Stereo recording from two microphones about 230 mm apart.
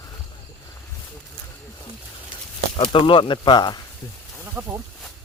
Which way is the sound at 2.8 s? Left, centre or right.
Left.